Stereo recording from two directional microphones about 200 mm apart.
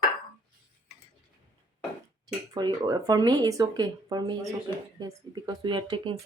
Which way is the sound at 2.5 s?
20° right (ahead or behind).